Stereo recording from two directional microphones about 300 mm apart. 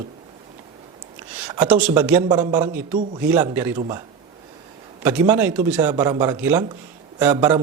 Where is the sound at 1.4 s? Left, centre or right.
Centre.